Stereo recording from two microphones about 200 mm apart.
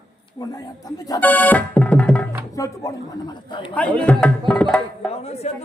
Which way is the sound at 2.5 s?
15° left (ahead or behind).